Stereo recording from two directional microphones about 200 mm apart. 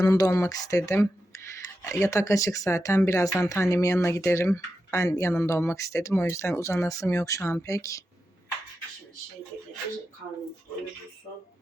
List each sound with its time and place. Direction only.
0.0 s speech: 15° left (ahead or behind)